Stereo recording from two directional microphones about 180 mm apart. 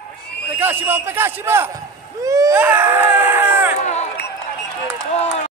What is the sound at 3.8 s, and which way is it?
Run, 40° left (ahead or behind).